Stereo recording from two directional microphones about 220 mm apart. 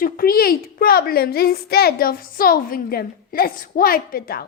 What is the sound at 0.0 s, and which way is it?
A woman's voice, 40° left (ahead or behind).